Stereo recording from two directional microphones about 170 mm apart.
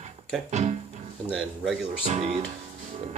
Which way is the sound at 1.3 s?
5° left (ahead or behind).